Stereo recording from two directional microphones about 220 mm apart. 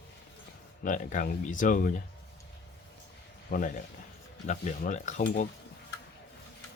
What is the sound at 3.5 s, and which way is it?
Speech, 45° left (ahead or behind).